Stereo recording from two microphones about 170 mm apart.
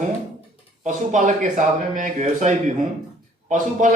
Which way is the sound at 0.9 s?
45° right (ahead or behind).